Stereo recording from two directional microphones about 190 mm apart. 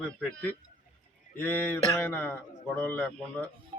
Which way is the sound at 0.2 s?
5° left (ahead or behind).